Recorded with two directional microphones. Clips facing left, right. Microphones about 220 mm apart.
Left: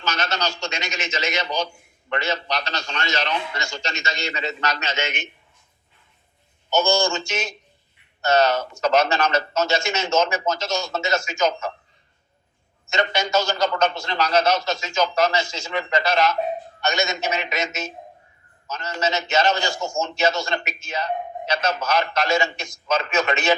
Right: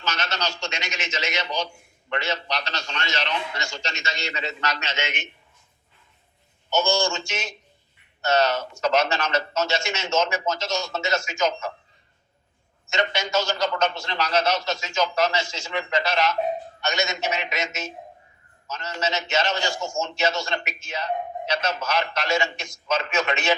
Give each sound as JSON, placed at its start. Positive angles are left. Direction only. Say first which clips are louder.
{"t": 0.0, "sound": "a man's voice", "louder": "left 3 dB", "side_deg": 40}
{"t": 6.7, "sound": "a man's voice", "louder": "left 3 dB", "side_deg": 40}
{"t": 12.9, "sound": "a man's voice", "louder": "left 3 dB", "side_deg": 40}